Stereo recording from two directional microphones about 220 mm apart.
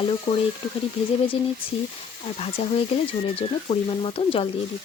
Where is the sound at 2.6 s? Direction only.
25° left (ahead or behind).